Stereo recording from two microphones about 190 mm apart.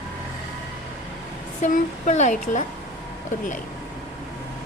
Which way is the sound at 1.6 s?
40° left (ahead or behind).